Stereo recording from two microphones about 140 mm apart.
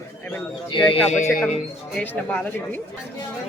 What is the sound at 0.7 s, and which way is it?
Speech, 35° left (ahead or behind).